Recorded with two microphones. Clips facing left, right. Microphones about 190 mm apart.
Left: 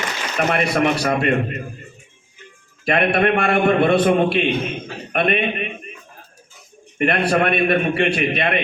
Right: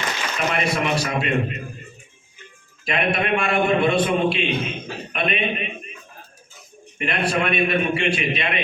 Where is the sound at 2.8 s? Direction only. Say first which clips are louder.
Left 5 dB; 60° left (ahead or behind).